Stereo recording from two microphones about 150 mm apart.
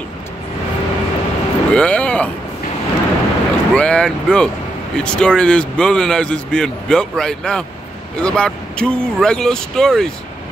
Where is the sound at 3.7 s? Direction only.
5° left (ahead or behind).